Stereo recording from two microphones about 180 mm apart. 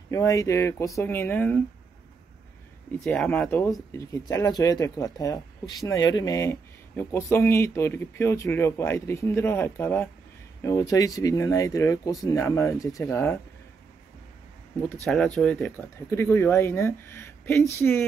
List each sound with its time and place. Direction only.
0.1 s speech: 15° left (ahead or behind)
3.0 s speech: 5° left (ahead or behind)
15.0 s speech: 5° left (ahead or behind)